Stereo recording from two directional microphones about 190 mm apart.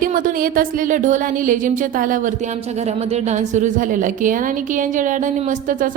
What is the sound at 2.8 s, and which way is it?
Speech, 35° right (ahead or behind).